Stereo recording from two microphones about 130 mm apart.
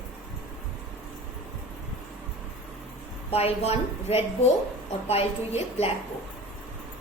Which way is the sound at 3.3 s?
50° left (ahead or behind).